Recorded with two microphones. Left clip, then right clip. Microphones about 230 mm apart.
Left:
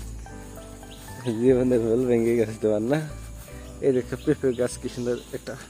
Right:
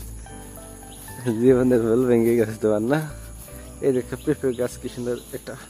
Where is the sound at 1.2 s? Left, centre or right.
Centre.